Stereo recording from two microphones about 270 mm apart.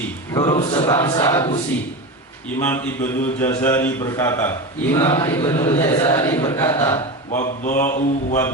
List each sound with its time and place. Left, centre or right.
0.3 s a man's voice: centre
2.6 s a man's voice: centre
5.0 s mantra: left
5.3 s a man's voice: centre
7.3 s mantra: left